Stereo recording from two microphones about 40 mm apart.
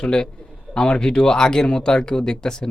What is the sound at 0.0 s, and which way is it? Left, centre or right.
A man's voice, left.